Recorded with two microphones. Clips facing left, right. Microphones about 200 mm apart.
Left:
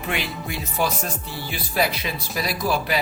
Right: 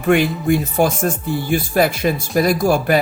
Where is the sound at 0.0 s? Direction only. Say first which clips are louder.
Right 13 dB; 50° right (ahead or behind).